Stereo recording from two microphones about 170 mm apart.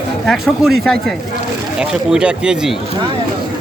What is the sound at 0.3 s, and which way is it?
Speech, centre (ahead or behind).